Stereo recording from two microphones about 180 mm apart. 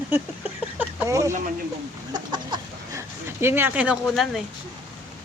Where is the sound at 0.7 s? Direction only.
15° right (ahead or behind).